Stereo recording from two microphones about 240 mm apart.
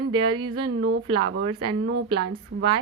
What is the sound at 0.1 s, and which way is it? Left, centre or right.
Speech, centre.